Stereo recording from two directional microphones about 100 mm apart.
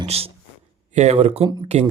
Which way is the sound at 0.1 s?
90° right.